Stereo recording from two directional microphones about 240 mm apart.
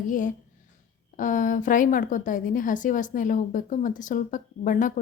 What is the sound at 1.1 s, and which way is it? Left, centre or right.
A woman's voice, left.